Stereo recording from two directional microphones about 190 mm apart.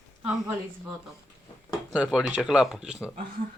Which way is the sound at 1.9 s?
5° right (ahead or behind).